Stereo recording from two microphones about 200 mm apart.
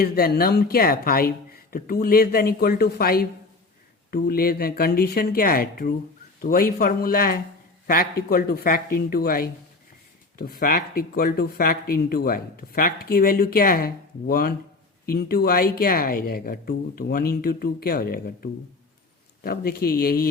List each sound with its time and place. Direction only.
0.0 s speech: 50° left (ahead or behind)
19.4 s speech: 50° left (ahead or behind)